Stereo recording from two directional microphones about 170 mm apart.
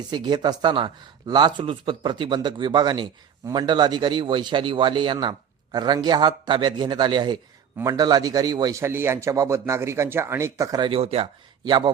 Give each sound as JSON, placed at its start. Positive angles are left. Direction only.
{"t": 0.1, "sound": "a man's voice", "side_deg": -25}